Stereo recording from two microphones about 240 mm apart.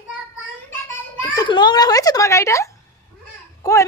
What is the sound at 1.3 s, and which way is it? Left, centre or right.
A child's voice, centre.